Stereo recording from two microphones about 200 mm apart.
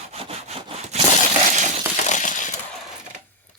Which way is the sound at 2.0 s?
40° left (ahead or behind).